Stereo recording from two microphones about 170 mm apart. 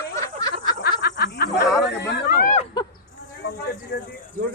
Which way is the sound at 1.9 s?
90° left.